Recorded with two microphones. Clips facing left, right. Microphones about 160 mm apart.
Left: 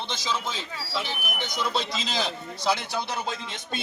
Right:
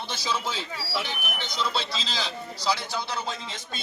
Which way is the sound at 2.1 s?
55° left (ahead or behind).